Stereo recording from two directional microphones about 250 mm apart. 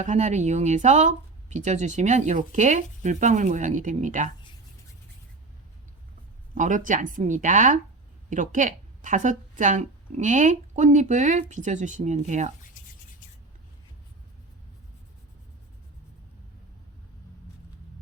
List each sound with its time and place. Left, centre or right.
0.0 s speech: right
6.5 s speech: right